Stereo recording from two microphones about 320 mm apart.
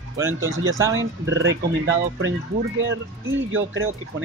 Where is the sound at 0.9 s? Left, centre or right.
Right.